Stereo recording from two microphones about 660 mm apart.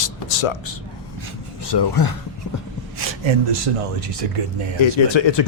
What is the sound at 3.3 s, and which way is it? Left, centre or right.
Speech, right.